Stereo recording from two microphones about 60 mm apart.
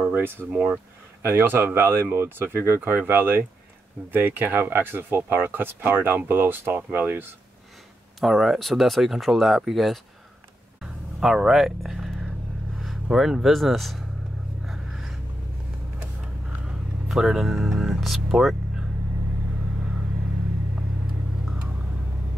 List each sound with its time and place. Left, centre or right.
0.0 s speech: right
0.5 s speech: right
1.2 s speech: right
8.2 s speech: centre
10.8 s a sound: centre
12.8 s speech: centre
14.7 s a sound: centre
17.1 s speech: centre